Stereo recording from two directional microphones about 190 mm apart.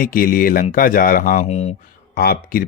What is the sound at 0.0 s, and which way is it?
Speech, 45° left (ahead or behind).